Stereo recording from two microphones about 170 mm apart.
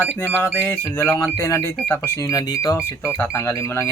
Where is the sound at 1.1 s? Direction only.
Centre (ahead or behind).